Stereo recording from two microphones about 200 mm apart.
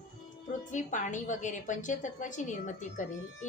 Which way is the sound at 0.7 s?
40° left (ahead or behind).